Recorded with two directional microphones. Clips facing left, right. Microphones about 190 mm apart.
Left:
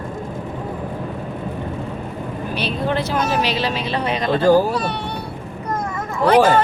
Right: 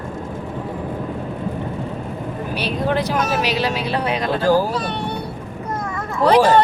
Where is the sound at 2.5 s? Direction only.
10° right (ahead or behind).